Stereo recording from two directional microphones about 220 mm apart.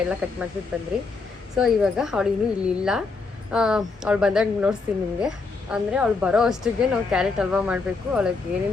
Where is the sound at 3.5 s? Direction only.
5° right (ahead or behind).